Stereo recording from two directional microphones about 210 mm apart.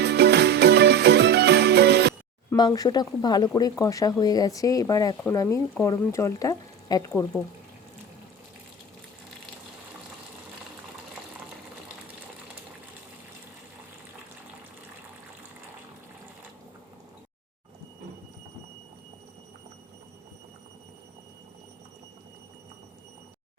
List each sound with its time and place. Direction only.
0.0 s music: 50° right (ahead or behind)
2.5 s speech: 20° left (ahead or behind)